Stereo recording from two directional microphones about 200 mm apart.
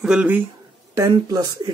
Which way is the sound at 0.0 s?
5° right (ahead or behind).